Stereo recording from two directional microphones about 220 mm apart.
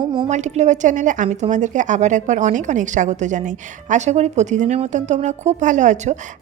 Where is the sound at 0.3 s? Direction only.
30° right (ahead or behind).